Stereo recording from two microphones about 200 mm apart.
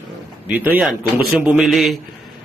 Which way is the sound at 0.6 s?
10° right (ahead or behind).